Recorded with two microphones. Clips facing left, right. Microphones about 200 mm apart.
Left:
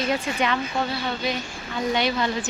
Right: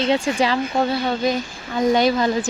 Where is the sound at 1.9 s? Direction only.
40° right (ahead or behind).